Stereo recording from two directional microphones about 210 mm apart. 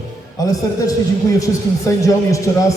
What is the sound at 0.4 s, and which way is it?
A man's voice, 15° left (ahead or behind).